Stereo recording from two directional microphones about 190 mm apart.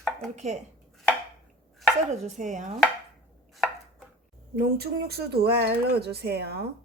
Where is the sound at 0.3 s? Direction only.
35° right (ahead or behind).